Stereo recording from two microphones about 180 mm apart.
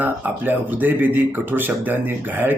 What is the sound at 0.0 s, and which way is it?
Speech, 10° right (ahead or behind).